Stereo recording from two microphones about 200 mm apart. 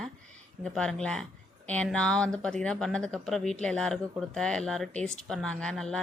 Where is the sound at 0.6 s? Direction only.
5° left (ahead or behind).